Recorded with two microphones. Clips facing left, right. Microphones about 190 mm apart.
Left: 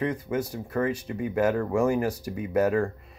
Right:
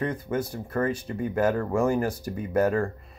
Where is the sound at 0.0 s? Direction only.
15° left (ahead or behind).